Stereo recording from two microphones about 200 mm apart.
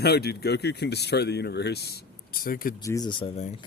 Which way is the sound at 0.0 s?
55° left (ahead or behind).